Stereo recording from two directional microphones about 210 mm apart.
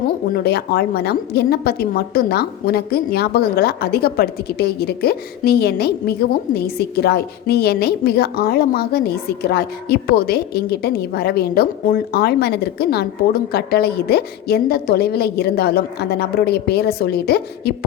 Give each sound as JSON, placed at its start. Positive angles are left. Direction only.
{"t": 0.3, "sound": "a woman's voice", "side_deg": 50}